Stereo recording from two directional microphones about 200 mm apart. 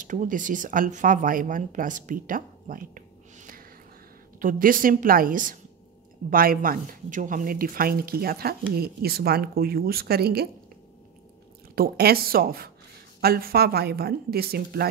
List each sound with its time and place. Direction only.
0.0 s speech: 40° right (ahead or behind)
11.7 s speech: 50° right (ahead or behind)